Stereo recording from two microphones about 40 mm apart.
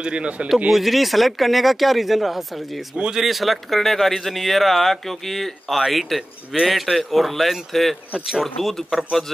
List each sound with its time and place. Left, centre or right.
0.0 s speech: right
0.7 s speech: centre